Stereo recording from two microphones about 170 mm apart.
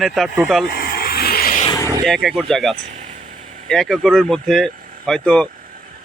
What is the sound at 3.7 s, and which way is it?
Speech, 5° left (ahead or behind).